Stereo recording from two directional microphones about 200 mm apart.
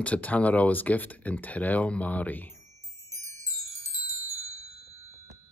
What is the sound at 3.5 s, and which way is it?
Glockenspiel, 90° left.